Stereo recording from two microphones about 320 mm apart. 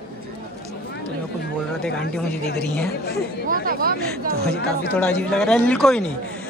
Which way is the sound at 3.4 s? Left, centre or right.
Right.